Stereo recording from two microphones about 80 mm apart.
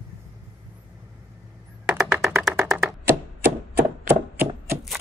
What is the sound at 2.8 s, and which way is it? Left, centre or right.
Thunk, right.